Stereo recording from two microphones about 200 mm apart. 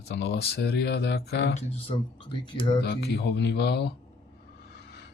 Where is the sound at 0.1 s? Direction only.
55° left (ahead or behind).